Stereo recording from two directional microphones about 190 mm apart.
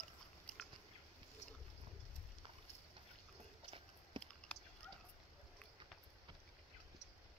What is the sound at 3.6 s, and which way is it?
Biting, 25° right (ahead or behind).